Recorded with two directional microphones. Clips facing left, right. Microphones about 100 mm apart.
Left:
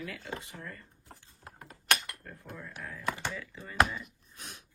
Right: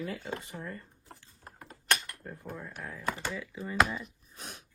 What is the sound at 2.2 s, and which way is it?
Speech, 15° right (ahead or behind).